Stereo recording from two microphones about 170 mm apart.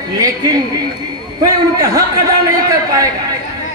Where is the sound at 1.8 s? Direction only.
20° right (ahead or behind).